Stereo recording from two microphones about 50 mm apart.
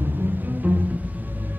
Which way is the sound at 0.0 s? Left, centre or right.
Right.